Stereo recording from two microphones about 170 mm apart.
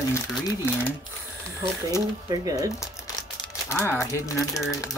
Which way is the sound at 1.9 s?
20° right (ahead or behind).